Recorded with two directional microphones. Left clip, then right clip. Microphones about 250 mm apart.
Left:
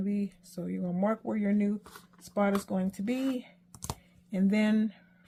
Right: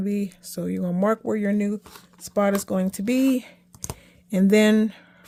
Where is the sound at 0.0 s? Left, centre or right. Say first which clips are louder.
Right 7 dB; right.